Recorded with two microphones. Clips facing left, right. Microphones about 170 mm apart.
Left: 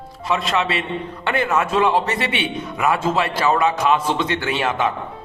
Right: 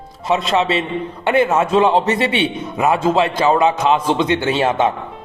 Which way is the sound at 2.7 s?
25° right (ahead or behind).